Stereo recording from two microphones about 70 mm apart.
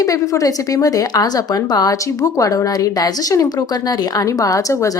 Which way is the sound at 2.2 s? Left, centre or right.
Left.